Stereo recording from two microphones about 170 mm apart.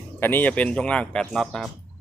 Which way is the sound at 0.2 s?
10° left (ahead or behind).